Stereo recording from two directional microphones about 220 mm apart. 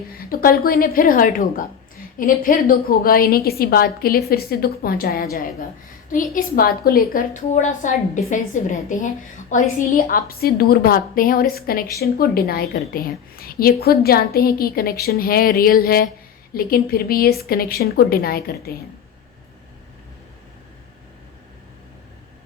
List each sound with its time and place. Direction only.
0.2 s a woman's voice: 40° left (ahead or behind)